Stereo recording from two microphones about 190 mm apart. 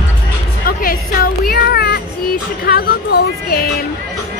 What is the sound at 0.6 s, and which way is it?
Music, 50° left (ahead or behind).